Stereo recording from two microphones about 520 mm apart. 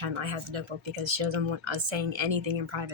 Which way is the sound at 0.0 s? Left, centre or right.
Right.